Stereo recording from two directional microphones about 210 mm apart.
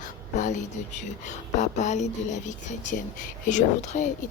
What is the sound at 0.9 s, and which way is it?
Speech, 35° left (ahead or behind).